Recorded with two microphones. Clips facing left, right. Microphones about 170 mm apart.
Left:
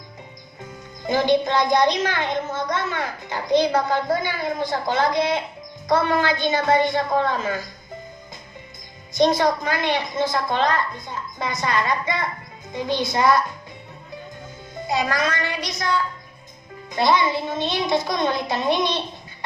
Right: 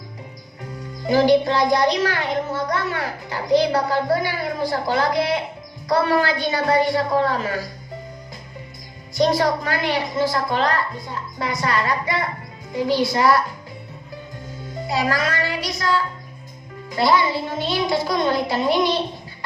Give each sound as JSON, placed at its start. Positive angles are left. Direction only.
{"t": 1.0, "sound": "a child's voice", "side_deg": 20}
{"t": 9.1, "sound": "a child's voice", "side_deg": 20}
{"t": 14.8, "sound": "a child's voice", "side_deg": 20}
{"t": 16.9, "sound": "a child's voice", "side_deg": 20}